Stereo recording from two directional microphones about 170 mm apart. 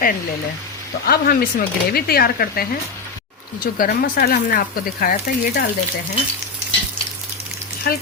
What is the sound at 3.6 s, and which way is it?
Speech, 60° left (ahead or behind).